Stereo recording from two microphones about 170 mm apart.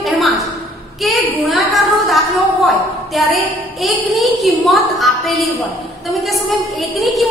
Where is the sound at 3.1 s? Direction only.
Centre (ahead or behind).